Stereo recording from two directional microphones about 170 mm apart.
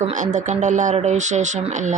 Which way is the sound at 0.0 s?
45° right (ahead or behind).